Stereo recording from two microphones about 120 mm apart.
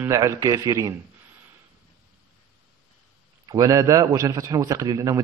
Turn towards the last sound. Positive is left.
turn(degrees=-30)  # may be behind; listen again after turning